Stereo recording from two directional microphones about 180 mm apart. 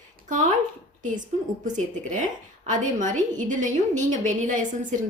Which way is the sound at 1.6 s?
45° right (ahead or behind).